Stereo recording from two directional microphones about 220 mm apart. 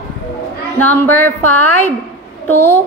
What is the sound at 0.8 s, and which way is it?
A man's voice, 10° left (ahead or behind).